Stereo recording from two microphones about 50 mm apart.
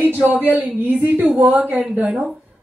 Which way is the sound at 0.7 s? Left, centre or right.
Right.